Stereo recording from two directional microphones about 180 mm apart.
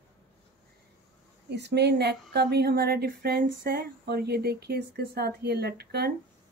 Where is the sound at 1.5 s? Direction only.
70° right (ahead or behind).